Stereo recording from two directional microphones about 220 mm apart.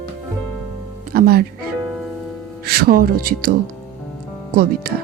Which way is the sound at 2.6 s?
45° right (ahead or behind).